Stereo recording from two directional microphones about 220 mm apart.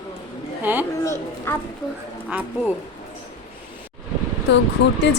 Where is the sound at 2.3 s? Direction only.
10° right (ahead or behind).